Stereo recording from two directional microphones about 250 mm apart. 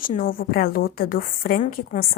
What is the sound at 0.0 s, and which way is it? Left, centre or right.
A woman's voice, left.